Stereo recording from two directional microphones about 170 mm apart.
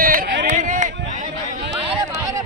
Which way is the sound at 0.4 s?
50° right (ahead or behind).